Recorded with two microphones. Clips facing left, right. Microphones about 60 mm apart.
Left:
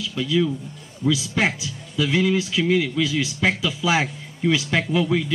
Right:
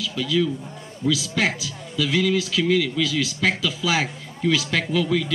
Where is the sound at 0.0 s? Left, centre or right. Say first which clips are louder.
Left 1 dB; left.